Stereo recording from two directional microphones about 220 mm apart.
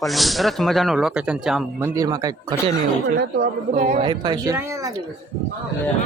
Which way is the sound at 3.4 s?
35° right (ahead or behind).